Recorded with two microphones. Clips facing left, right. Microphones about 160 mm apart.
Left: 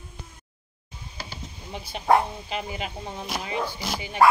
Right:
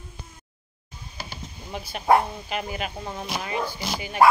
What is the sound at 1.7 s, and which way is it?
Speech, 25° left (ahead or behind).